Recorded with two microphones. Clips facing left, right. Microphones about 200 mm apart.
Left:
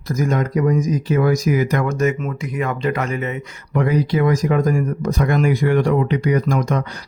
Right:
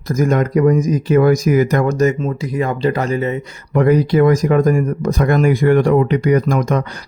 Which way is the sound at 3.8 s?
50° right (ahead or behind).